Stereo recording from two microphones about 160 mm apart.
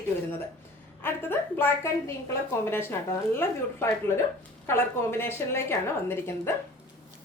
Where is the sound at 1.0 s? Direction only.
15° left (ahead or behind).